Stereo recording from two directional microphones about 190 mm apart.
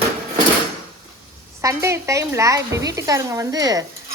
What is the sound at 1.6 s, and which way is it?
Stir, 15° right (ahead or behind).